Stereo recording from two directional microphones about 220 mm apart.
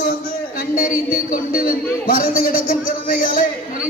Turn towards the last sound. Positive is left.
turn(degrees=40)  # may be behind; listen again after turning